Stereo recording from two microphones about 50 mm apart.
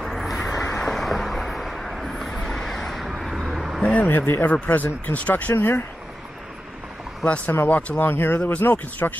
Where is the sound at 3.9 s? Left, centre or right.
Left.